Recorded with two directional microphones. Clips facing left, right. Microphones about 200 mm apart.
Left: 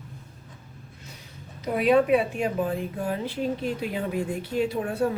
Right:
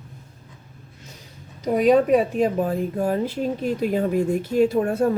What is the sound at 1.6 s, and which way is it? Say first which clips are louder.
A woman's voice: right 4 dB; 40° right (ahead or behind).